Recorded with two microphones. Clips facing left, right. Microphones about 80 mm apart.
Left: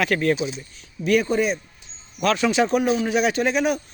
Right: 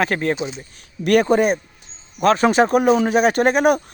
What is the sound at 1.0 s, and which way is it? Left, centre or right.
Speech, right.